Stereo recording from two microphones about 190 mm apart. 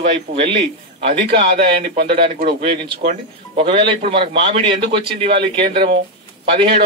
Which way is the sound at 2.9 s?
30° right (ahead or behind).